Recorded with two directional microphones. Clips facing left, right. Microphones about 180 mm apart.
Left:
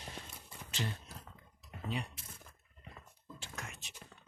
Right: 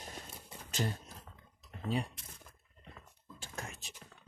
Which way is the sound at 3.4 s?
35° right (ahead or behind).